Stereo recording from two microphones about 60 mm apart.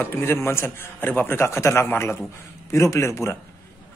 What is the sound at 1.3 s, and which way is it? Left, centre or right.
A man's voice, left.